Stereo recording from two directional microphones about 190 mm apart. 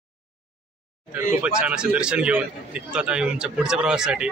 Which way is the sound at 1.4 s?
5° right (ahead or behind).